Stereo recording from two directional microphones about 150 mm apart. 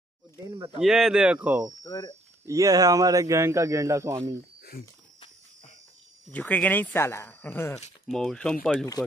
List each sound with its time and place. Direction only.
0.7 s speech: 5° right (ahead or behind)
1.8 s speech: 25° left (ahead or behind)
2.4 s speech: 20° right (ahead or behind)
4.6 s a sound: 80° left
6.3 s speech: 10° left (ahead or behind)
8.1 s speech: 5° left (ahead or behind)